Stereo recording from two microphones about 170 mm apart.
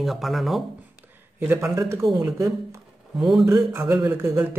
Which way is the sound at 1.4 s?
10° right (ahead or behind).